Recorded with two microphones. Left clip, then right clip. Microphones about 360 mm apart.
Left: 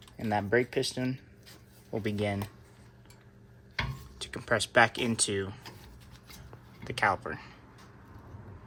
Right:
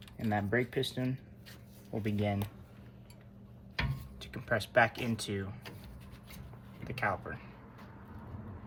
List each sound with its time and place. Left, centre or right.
0.2 s speech: left
4.2 s speech: left
6.8 s speech: left